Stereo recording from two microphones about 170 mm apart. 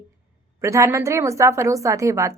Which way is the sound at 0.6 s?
15° right (ahead or behind).